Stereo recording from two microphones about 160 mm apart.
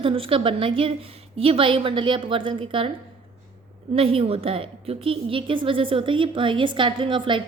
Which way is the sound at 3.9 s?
35° right (ahead or behind).